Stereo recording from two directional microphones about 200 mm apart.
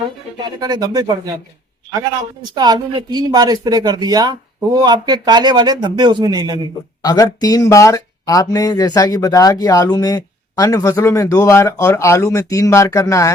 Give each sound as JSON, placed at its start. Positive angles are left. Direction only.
{"t": 0.6, "sound": "speech", "side_deg": -20}
{"t": 2.6, "sound": "speech", "side_deg": -20}
{"t": 7.0, "sound": "speech", "side_deg": 20}